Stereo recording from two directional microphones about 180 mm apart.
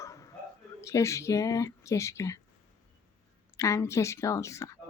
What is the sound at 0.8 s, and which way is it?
Speech, 15° left (ahead or behind).